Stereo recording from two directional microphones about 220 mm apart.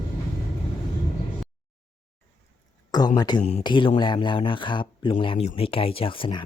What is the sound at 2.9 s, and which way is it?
Speech, 20° left (ahead or behind).